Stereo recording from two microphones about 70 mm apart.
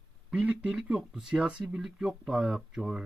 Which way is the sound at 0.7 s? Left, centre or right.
Centre.